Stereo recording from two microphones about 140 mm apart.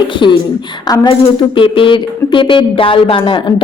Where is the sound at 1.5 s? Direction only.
40° left (ahead or behind).